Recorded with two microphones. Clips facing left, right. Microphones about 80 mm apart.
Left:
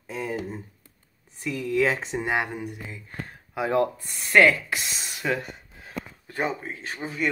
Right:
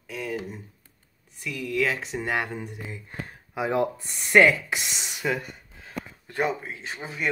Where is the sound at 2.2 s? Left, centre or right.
Centre.